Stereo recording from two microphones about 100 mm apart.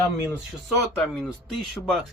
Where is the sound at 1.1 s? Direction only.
Centre (ahead or behind).